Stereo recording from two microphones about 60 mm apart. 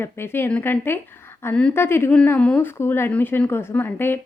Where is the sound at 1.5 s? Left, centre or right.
Centre.